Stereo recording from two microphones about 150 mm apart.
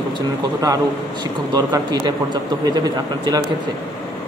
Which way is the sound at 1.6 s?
25° right (ahead or behind).